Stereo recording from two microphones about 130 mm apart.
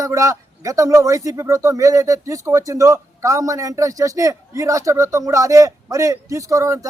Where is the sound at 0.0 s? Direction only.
25° right (ahead or behind).